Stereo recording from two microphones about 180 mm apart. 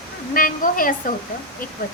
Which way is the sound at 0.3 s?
50° left (ahead or behind).